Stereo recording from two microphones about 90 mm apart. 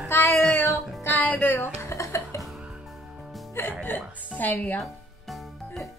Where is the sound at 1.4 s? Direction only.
30° left (ahead or behind).